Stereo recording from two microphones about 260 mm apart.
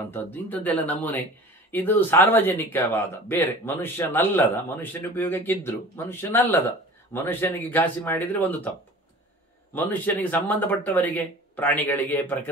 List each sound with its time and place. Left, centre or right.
0.1 s speech: centre
9.8 s speech: centre